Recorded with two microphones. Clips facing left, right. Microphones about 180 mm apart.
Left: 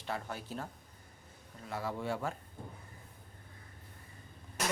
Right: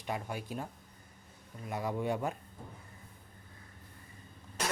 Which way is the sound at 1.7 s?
15° right (ahead or behind).